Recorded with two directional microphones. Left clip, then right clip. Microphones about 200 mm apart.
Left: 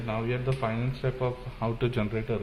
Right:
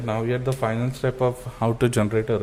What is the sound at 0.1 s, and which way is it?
A man's voice, 65° right (ahead or behind).